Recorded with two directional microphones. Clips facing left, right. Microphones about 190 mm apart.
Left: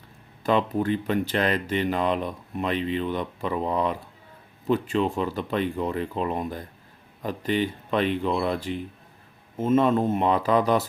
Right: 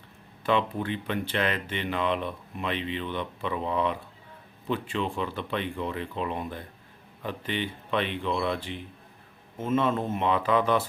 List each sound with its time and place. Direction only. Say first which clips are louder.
0.4 s speech: left 4 dB; 40° left (ahead or behind)